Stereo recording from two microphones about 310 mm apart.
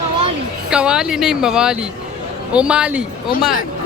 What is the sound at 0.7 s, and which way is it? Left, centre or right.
Speech, centre.